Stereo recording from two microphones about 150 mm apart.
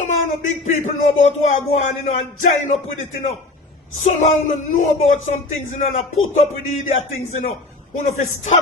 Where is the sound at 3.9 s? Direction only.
50° left (ahead or behind).